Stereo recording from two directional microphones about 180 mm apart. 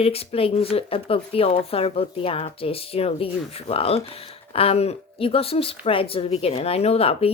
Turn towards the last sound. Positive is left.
turn(degrees=35)  # may be behind; listen again after turning